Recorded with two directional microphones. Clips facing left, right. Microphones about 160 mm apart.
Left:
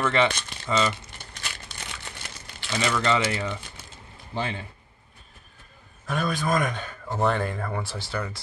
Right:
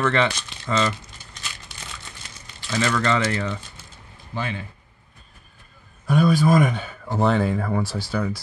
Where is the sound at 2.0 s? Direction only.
65° left (ahead or behind).